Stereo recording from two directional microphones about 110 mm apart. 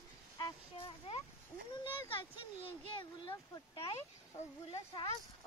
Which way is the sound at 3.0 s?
50° left (ahead or behind).